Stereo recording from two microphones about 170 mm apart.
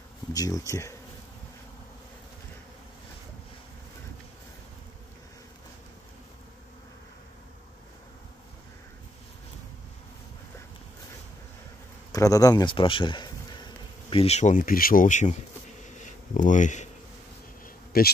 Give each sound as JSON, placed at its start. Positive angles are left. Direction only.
{"t": 0.3, "sound": "a man's voice", "side_deg": 20}
{"t": 12.1, "sound": "a man's voice", "side_deg": 20}
{"t": 14.1, "sound": "speech", "side_deg": 40}
{"t": 16.0, "sound": "bee", "side_deg": 50}
{"t": 17.9, "sound": "speech", "side_deg": 60}